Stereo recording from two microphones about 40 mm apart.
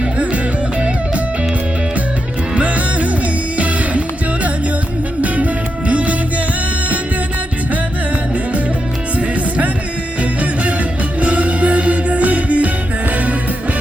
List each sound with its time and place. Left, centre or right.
2.6 s music: right
5.9 s music: right
10.2 s music: right